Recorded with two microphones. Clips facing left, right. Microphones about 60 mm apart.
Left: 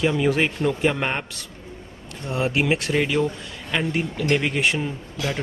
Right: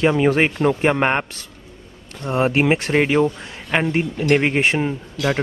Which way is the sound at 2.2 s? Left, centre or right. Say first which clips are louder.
Right 5 dB; right.